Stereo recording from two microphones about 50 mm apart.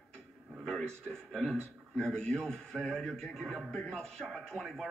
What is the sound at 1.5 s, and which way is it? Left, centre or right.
A man's voice, centre.